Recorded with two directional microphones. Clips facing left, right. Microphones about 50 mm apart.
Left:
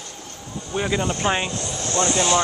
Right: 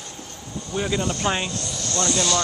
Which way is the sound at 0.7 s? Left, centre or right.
Centre.